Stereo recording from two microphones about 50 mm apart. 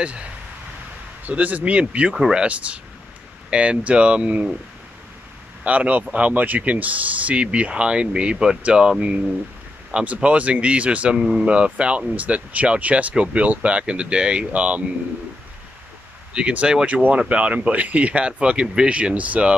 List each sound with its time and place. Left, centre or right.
1.2 s speech: right
5.6 s speech: right
16.3 s speech: right